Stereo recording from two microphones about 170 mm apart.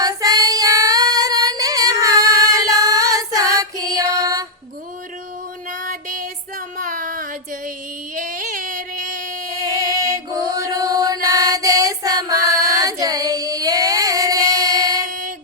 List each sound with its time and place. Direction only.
0.0 s female singing: 20° right (ahead or behind)
5.8 s female singing: 50° right (ahead or behind)
6.7 s a sound: 50° right (ahead or behind)
10.0 s mantra: 20° right (ahead or behind)
12.5 s singing: 20° right (ahead or behind)